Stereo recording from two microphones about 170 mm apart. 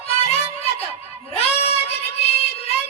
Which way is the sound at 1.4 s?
35° left (ahead or behind).